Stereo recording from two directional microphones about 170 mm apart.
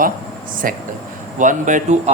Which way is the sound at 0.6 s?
55° right (ahead or behind).